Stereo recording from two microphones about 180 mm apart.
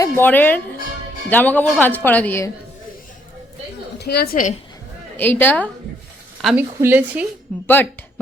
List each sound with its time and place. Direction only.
0.0 s speech: 10° left (ahead or behind)
3.9 s a woman's voice: 60° left (ahead or behind)
5.1 s speech: 10° left (ahead or behind)
6.4 s a woman's voice: 5° right (ahead or behind)
7.5 s speech: 5° left (ahead or behind)